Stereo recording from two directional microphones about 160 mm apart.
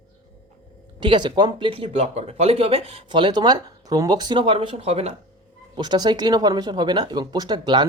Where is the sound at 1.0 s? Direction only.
30° right (ahead or behind).